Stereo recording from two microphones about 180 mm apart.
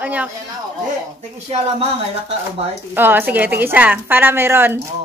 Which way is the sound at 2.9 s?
10° right (ahead or behind).